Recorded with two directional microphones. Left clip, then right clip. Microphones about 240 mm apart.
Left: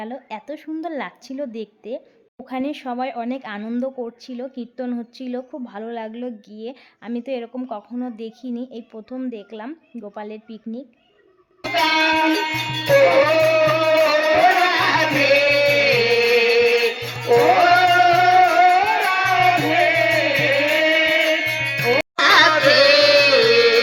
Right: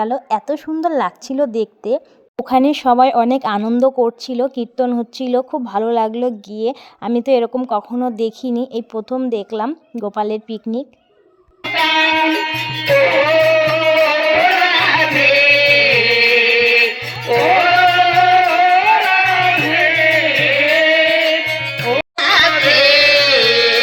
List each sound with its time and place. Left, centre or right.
0.0 s speech: right
11.6 s music: centre
22.2 s music: left